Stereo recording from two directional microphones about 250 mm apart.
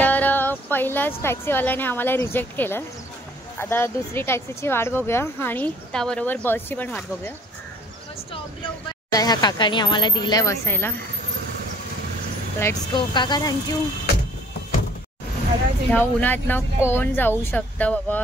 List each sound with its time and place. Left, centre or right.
0.0 s speech: centre
9.1 s speech: centre
12.5 s speech: centre
15.9 s speech: centre